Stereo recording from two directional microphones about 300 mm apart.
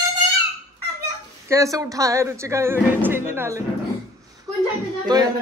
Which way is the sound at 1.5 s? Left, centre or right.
Centre.